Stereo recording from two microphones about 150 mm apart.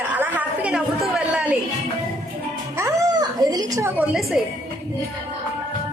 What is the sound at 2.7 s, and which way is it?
Speech, 20° right (ahead or behind).